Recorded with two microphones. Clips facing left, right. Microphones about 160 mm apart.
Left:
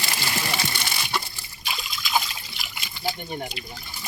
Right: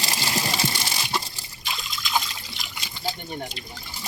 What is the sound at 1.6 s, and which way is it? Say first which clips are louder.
Water: even; 5° left (ahead or behind).